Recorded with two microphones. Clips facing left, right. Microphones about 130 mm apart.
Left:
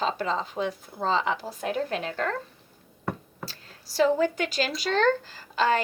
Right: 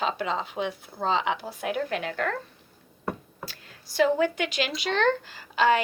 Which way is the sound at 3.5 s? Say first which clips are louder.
Even; 40° left (ahead or behind).